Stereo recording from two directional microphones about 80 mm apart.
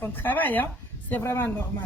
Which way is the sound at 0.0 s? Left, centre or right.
Left.